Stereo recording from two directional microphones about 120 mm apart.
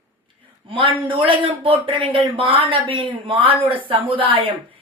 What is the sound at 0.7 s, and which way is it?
Speech, 45° right (ahead or behind).